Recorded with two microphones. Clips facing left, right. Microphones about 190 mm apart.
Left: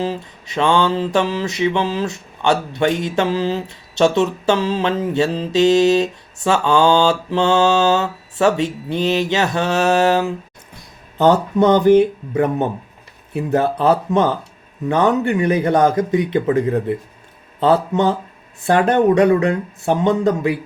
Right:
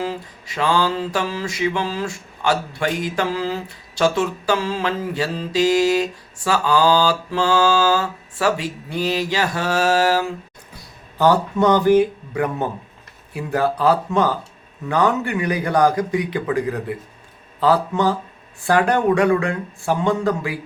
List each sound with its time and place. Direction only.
0.0 s mantra: 25° left (ahead or behind)